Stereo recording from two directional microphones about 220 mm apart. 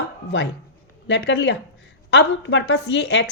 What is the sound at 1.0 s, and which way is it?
A woman's voice, 55° left (ahead or behind).